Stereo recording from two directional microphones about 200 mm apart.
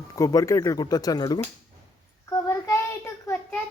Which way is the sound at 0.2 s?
15° left (ahead or behind).